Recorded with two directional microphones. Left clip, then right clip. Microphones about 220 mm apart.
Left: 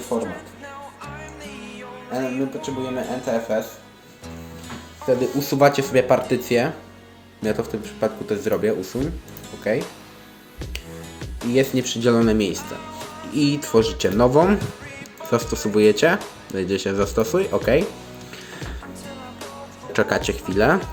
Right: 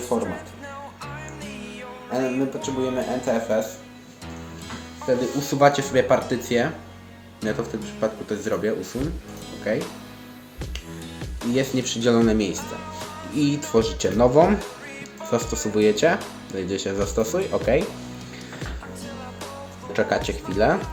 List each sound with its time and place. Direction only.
0.1 s speech: centre (ahead or behind)
2.1 s speech: centre (ahead or behind)
5.0 s speech: 25° left (ahead or behind)
8.0 s speech: 25° left (ahead or behind)
11.5 s speech: 20° left (ahead or behind)
14.6 s music: centre (ahead or behind)
15.5 s speech: 20° left (ahead or behind)
19.9 s speech: 25° left (ahead or behind)